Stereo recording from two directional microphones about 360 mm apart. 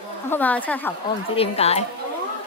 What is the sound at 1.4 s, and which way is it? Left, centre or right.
Speech, centre.